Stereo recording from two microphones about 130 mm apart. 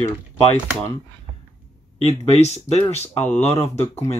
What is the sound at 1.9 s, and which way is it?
Speech, 60° left (ahead or behind).